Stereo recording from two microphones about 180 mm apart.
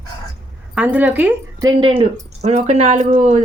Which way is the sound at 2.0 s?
35° right (ahead or behind).